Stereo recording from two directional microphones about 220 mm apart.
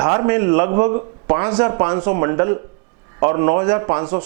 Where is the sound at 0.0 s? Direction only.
15° right (ahead or behind).